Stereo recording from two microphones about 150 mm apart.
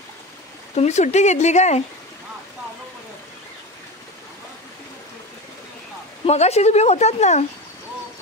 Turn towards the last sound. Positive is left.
turn(degrees=50)  # may be behind; listen again after turning